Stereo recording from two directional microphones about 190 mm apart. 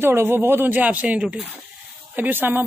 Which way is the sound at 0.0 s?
10° right (ahead or behind).